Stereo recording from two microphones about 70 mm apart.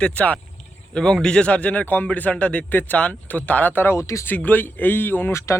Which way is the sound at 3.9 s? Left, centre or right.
Left.